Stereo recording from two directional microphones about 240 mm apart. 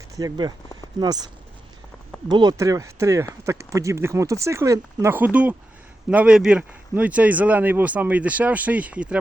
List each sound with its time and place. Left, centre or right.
0.2 s speech: centre
2.3 s speech: centre